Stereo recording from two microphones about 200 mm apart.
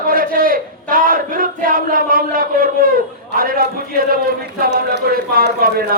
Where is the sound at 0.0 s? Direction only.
45° right (ahead or behind).